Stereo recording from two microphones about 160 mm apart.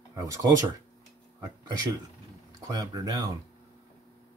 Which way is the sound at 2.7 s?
25° right (ahead or behind).